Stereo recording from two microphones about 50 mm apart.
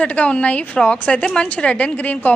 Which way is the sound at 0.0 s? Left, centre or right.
Left.